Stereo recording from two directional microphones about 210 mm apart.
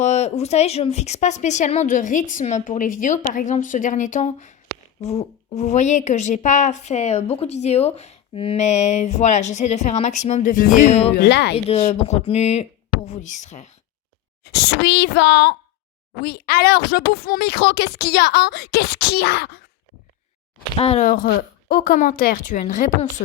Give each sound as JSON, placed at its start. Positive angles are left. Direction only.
{"t": 0.0, "sound": "a woman's voice", "side_deg": 30}
{"t": 11.1, "sound": "speech", "side_deg": 50}
{"t": 11.5, "sound": "a woman's voice", "side_deg": 30}
{"t": 14.5, "sound": "speech", "side_deg": 50}
{"t": 20.7, "sound": "speech", "side_deg": 30}
{"t": 21.1, "sound": "a woman's voice", "side_deg": 45}